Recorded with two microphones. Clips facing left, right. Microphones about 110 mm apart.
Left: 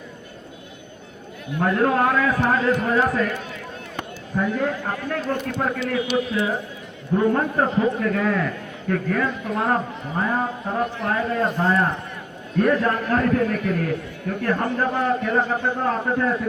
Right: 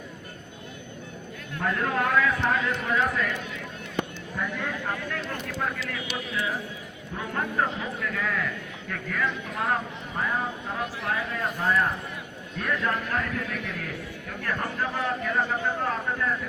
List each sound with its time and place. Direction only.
1.6 s a man's voice: 45° left (ahead or behind)